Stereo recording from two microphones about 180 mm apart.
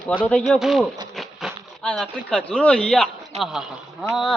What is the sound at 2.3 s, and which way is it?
Speech, 5° left (ahead or behind).